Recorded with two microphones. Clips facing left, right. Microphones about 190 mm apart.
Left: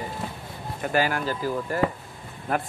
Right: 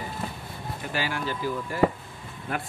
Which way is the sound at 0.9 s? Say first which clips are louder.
Left 6 dB; 50° left (ahead or behind).